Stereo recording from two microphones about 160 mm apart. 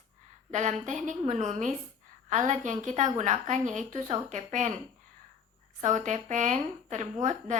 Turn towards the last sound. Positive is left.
turn(degrees=-50)  # may be behind; listen again after turning